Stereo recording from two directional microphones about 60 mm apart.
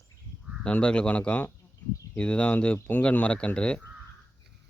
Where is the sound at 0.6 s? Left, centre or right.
Centre.